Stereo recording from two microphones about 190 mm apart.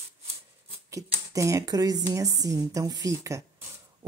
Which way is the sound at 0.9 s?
15° right (ahead or behind).